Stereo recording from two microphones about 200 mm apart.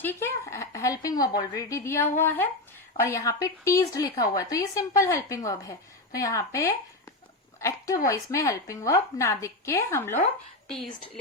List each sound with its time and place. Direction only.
0.0 s speech: 10° left (ahead or behind)